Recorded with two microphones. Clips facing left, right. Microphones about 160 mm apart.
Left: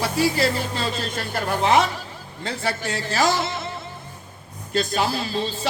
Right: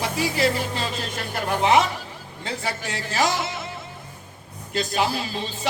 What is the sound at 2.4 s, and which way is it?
Music, 15° right (ahead or behind).